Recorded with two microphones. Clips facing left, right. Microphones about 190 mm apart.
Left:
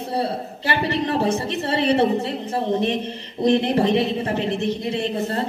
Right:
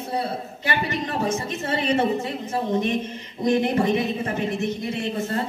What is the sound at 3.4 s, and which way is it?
A woman's voice, 30° left (ahead or behind).